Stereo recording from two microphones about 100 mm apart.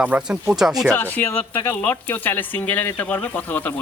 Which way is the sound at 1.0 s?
15° left (ahead or behind).